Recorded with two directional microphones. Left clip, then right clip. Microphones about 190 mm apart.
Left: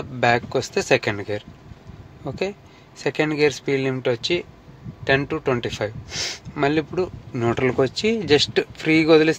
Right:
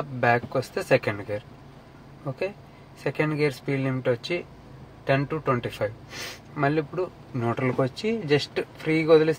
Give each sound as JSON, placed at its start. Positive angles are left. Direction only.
{"t": 0.2, "sound": "speech", "side_deg": 60}
{"t": 3.0, "sound": "speech", "side_deg": 65}